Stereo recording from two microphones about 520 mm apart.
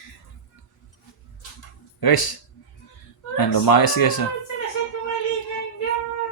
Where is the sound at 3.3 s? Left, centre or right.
Left.